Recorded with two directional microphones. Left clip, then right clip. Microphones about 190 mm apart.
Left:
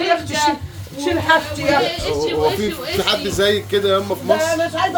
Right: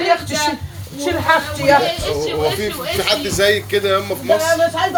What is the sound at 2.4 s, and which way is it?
Speech, 15° left (ahead or behind).